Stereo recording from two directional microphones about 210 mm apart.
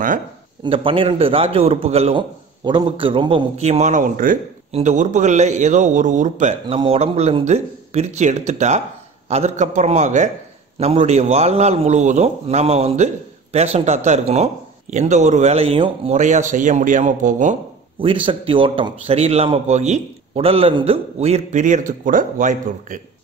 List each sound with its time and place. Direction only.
0.7 s a man's voice: 25° right (ahead or behind)
17.9 s a man's voice: 25° right (ahead or behind)